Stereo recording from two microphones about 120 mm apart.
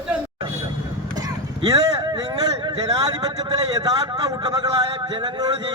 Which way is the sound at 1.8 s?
30° right (ahead or behind).